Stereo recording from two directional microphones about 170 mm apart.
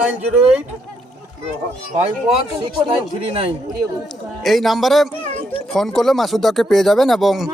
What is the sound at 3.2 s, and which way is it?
Speech, 30° right (ahead or behind).